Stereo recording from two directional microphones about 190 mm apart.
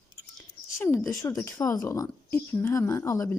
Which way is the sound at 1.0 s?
15° left (ahead or behind).